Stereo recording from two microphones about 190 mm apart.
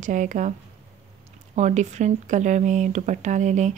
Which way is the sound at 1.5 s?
40° right (ahead or behind).